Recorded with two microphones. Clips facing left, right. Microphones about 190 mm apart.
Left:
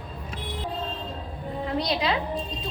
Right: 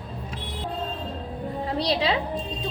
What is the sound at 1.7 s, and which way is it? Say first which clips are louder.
Speech: right 2 dB; 30° right (ahead or behind).